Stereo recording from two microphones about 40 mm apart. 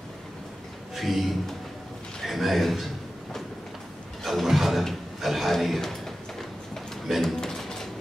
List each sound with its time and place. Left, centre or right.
0.9 s a man's voice: centre
2.2 s a man's voice: centre
4.2 s a sound: centre